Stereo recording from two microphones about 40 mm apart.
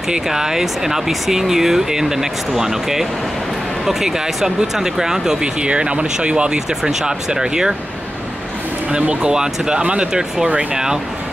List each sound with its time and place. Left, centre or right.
0.1 s speech: centre
5.4 s speech: right
9.1 s speech: right